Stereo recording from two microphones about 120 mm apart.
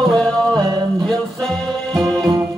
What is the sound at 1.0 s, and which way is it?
Music, 5° left (ahead or behind).